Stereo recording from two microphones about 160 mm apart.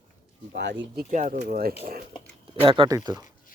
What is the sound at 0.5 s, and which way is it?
Speech, 90° right.